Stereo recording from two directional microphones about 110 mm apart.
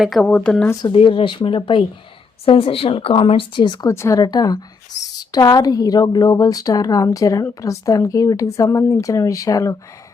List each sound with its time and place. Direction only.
0.0 s speech: centre (ahead or behind)
0.3 s speech: 10° left (ahead or behind)
0.9 s speech: 50° left (ahead or behind)
3.9 s speech: 25° left (ahead or behind)
4.2 s a woman's voice: 35° left (ahead or behind)